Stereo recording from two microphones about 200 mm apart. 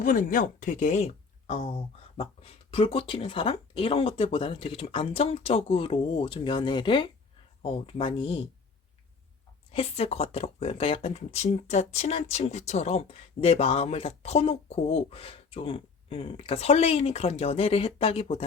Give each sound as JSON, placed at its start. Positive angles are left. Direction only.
{"t": 0.0, "sound": "speech", "side_deg": 40}
{"t": 9.7, "sound": "speech", "side_deg": 30}